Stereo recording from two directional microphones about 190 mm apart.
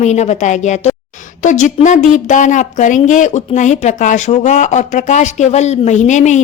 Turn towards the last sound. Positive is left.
turn(degrees=40)  # may be behind; listen again after turning